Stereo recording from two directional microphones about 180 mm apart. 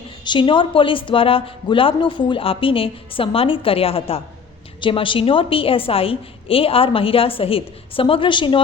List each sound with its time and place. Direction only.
0.3 s a woman's voice: 25° left (ahead or behind)